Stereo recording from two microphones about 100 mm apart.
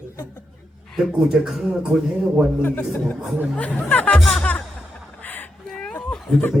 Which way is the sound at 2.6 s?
20° left (ahead or behind).